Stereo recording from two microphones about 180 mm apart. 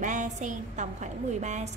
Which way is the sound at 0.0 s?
45° right (ahead or behind).